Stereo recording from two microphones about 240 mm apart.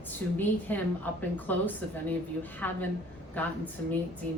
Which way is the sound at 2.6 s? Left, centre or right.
Centre.